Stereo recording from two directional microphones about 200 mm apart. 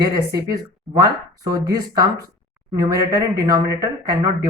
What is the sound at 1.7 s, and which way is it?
Speech, 15° right (ahead or behind).